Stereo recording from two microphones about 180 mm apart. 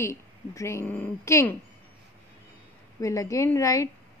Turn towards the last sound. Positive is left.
turn(degrees=15)  # may be behind; listen again after turning